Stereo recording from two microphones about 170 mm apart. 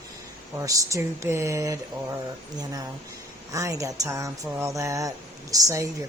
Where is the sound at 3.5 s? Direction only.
20° right (ahead or behind).